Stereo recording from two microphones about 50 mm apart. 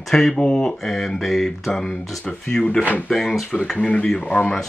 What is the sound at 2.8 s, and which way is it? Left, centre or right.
Speech, left.